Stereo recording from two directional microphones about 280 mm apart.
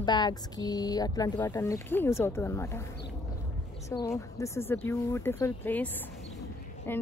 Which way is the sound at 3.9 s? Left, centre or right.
Centre.